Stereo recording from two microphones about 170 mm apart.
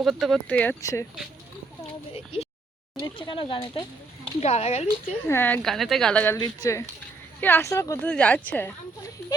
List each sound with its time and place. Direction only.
0.0 s speech: centre (ahead or behind)
0.8 s speech: 20° left (ahead or behind)
3.0 s speech: 30° left (ahead or behind)
5.3 s speech: 10° left (ahead or behind)
5.6 s speech: centre (ahead or behind); by 7.9 s 20° left (ahead or behind)
8.0 s speech: 5° left (ahead or behind)